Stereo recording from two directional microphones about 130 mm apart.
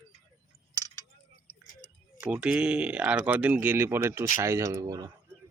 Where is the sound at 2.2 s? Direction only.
10° right (ahead or behind).